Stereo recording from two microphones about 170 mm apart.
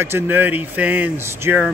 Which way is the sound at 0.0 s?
15° right (ahead or behind).